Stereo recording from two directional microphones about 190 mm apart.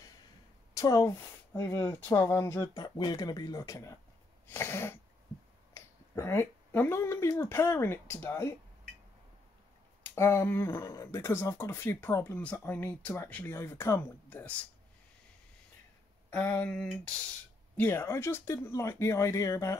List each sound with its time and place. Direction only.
0.7 s speech: 15° left (ahead or behind)
10.0 s speech: 15° left (ahead or behind)
16.3 s speech: 10° left (ahead or behind)